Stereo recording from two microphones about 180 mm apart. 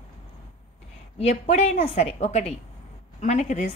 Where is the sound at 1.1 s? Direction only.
35° left (ahead or behind).